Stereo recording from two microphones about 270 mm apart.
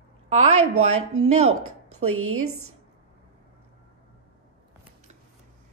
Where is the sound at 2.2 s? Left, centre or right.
Right.